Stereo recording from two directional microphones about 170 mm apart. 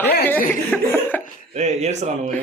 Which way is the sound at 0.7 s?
10° left (ahead or behind).